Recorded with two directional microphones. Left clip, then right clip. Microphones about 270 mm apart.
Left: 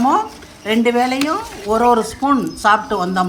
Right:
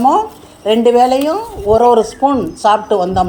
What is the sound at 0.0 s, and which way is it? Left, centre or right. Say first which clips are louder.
Speech: right 4 dB; left.